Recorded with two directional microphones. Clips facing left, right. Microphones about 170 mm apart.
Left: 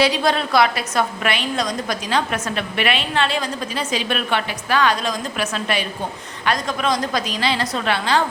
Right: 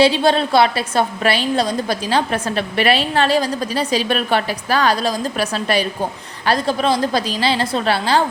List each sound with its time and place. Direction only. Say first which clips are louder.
0.0 s a woman's voice: right 4 dB; 30° right (ahead or behind)